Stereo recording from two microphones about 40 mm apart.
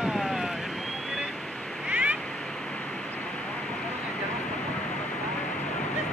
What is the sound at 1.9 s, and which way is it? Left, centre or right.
Cat, right.